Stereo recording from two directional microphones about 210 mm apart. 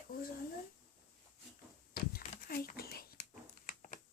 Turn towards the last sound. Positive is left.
turn(degrees=45)  # may be behind; listen again after turning